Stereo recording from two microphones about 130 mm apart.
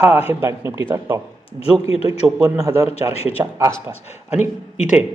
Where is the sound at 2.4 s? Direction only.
25° right (ahead or behind).